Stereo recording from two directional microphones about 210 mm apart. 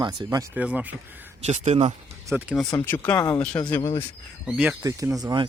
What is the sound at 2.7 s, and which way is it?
Speech, 10° left (ahead or behind).